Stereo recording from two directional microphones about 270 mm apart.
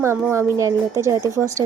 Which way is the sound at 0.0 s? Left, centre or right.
Centre.